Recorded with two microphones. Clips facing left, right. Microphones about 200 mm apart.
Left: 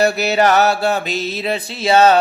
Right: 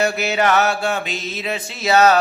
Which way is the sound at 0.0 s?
35° left (ahead or behind).